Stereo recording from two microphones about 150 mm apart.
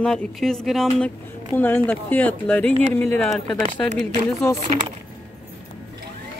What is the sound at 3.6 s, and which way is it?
Speech, 50° right (ahead or behind).